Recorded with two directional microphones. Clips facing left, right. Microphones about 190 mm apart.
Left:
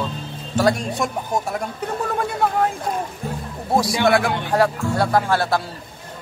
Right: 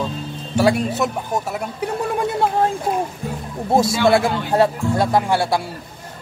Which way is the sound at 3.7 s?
25° right (ahead or behind).